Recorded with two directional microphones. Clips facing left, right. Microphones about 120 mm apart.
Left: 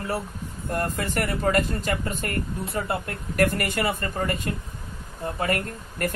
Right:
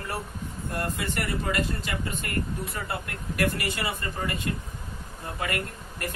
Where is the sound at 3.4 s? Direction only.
50° left (ahead or behind).